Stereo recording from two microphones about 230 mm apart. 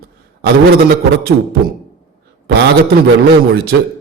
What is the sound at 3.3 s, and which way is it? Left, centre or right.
Speech, right.